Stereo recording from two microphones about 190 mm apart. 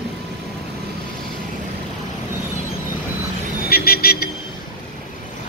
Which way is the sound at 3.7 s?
55° left (ahead or behind).